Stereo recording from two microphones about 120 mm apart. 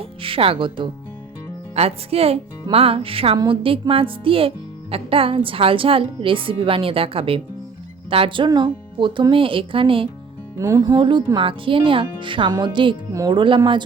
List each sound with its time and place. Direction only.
0.0 s speech: 50° right (ahead or behind)
1.7 s speech: 60° right (ahead or behind)
10.6 s music: 30° right (ahead or behind)
11.3 s speech: 45° right (ahead or behind)